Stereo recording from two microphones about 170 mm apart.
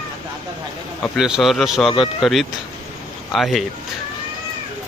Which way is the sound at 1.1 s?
5° right (ahead or behind).